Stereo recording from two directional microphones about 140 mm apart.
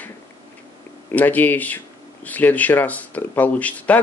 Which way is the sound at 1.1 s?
10° left (ahead or behind).